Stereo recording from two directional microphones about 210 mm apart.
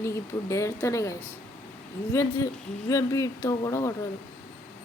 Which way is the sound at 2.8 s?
15° left (ahead or behind).